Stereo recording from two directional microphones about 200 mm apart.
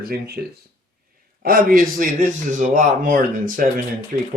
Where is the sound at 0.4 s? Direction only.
55° right (ahead or behind).